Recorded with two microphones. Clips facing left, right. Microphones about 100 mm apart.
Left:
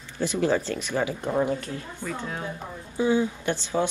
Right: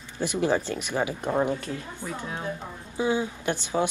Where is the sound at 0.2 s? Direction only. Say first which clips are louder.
Left 1 dB; 15° right (ahead or behind).